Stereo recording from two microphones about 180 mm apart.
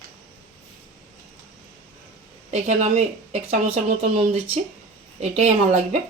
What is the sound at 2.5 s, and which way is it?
Speech, 40° right (ahead or behind).